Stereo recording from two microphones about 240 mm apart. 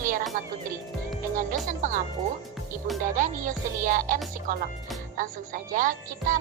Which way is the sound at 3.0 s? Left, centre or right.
Right.